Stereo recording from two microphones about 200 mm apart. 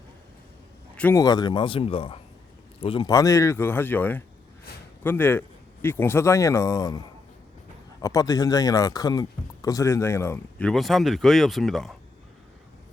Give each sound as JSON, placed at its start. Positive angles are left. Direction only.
{"t": 0.9, "sound": "speech", "side_deg": 10}
{"t": 1.2, "sound": "speech", "side_deg": 20}
{"t": 8.0, "sound": "speech", "side_deg": 15}